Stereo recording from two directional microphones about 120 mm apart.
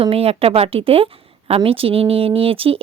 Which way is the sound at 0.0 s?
55° right (ahead or behind).